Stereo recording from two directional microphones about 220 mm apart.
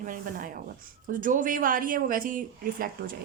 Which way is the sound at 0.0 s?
35° right (ahead or behind).